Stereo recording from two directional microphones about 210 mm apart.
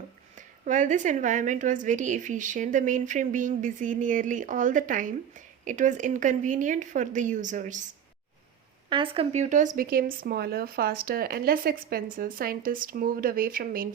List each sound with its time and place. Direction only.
0.3 s a woman's voice: 35° right (ahead or behind)
8.9 s speech: 25° right (ahead or behind); by 13.8 s 40° right (ahead or behind)